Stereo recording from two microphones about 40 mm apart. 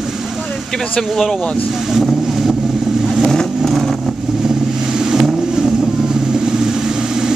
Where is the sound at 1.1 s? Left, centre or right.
Centre.